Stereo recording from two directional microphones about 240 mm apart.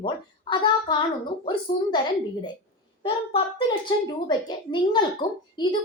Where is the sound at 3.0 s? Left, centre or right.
Left.